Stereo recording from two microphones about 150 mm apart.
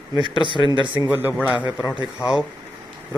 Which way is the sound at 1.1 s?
15° right (ahead or behind).